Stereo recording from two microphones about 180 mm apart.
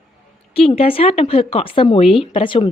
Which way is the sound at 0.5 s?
35° left (ahead or behind).